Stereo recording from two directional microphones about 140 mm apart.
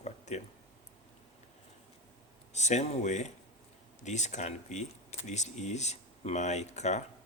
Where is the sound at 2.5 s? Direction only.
55° left (ahead or behind).